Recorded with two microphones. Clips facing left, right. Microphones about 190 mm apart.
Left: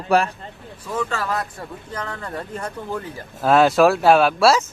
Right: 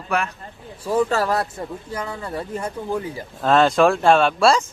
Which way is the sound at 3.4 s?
5° left (ahead or behind).